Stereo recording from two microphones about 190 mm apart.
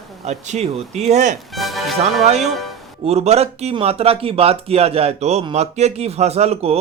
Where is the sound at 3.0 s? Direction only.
35° right (ahead or behind).